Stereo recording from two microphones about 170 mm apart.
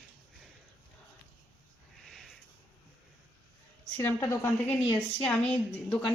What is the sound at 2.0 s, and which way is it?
Sniff, centre (ahead or behind).